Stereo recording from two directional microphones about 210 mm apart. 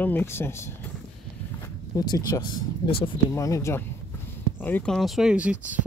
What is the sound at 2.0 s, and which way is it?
Speech, 20° left (ahead or behind).